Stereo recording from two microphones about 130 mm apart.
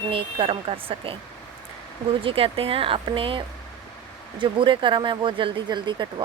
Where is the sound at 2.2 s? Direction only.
45° right (ahead or behind).